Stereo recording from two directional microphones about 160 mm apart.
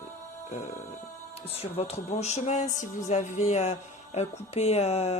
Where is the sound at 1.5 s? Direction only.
40° left (ahead or behind).